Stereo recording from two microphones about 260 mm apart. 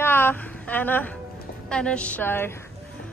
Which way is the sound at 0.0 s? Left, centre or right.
Centre.